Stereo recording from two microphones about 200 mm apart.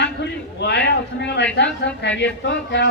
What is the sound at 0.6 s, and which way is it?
A woman's voice, 60° left (ahead or behind).